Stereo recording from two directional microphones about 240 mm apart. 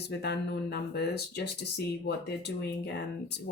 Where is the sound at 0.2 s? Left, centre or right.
Left.